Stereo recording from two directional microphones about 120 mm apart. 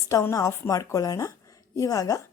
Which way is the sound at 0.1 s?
25° left (ahead or behind).